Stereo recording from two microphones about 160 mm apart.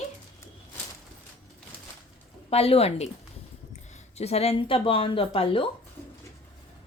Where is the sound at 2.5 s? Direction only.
40° left (ahead or behind).